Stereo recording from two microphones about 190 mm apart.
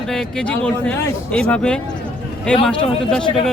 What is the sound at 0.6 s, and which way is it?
A man's voice, 10° left (ahead or behind).